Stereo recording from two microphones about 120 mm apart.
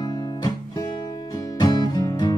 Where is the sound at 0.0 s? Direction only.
35° left (ahead or behind).